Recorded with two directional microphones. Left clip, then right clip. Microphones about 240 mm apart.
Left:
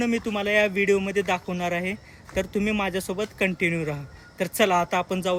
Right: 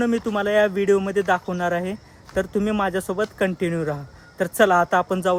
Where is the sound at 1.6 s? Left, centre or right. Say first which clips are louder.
Right 4 dB; right.